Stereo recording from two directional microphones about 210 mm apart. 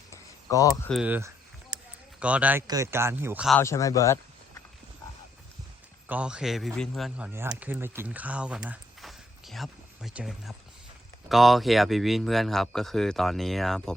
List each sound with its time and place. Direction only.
0.1 s a sound: 15° left (ahead or behind)
0.9 s speech: 5° right (ahead or behind)
1.7 s a sound: 20° right (ahead or behind)
2.2 s speech: 5° right (ahead or behind)
3.6 s speech: 15° left (ahead or behind)
6.1 s speech: 5° right (ahead or behind)